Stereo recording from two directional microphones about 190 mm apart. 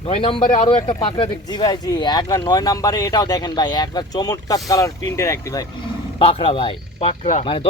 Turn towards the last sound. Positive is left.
turn(degrees=30)  # may be behind; listen again after turning